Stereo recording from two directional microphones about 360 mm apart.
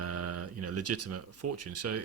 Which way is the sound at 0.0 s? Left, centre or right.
Right.